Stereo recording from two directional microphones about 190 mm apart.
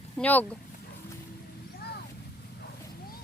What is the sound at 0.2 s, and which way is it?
Speech, 10° left (ahead or behind).